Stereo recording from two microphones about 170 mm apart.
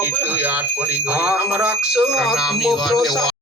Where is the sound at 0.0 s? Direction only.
10° right (ahead or behind).